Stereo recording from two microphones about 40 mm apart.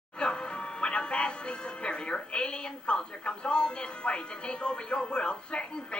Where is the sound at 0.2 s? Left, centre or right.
Left.